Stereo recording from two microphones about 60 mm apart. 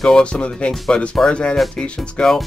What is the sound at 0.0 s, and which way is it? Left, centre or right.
Speech, centre.